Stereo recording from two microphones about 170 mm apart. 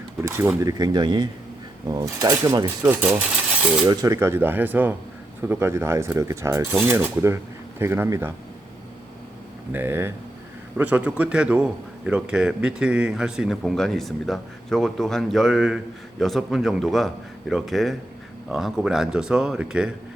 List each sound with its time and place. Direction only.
0.2 s speech: 15° right (ahead or behind)
9.7 s a man's voice: 15° right (ahead or behind)